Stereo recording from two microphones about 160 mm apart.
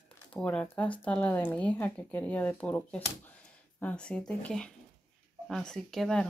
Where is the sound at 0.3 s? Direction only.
5° left (ahead or behind).